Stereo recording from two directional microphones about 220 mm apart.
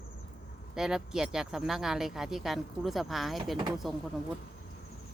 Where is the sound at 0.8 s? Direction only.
Centre (ahead or behind).